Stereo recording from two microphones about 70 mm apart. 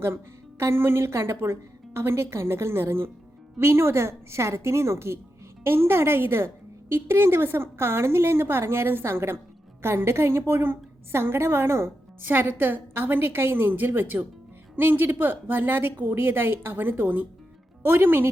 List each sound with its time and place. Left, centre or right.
0.6 s a woman's voice: right